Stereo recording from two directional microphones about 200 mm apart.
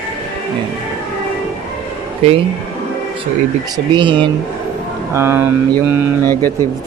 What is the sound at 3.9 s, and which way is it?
Speech, 25° right (ahead or behind).